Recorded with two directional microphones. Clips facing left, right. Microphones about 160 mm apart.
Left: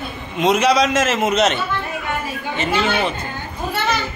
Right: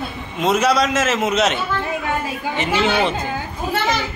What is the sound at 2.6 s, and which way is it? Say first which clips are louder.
Speech: right 1 dB; 15° right (ahead or behind).